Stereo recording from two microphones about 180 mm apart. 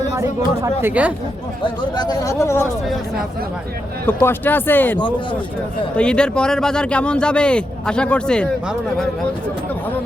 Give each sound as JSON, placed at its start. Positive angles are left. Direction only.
{"t": 0.1, "sound": "speech", "side_deg": -15}
{"t": 1.6, "sound": "speech", "side_deg": 25}
{"t": 4.0, "sound": "speech", "side_deg": 10}
{"t": 6.0, "sound": "a man's voice", "side_deg": 5}